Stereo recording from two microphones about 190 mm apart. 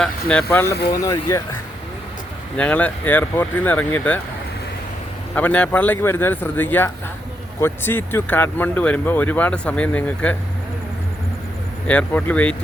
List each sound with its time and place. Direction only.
0.0 s speech: 5° left (ahead or behind)
2.6 s speech: 10° left (ahead or behind)
5.3 s speech: 10° left (ahead or behind)
11.9 s speech: 5° left (ahead or behind)